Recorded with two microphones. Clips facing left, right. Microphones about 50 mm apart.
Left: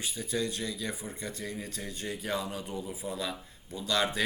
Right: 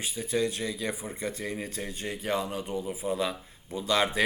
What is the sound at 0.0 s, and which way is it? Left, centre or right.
Speech, centre.